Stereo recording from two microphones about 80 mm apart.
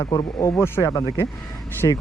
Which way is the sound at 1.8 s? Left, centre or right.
Left.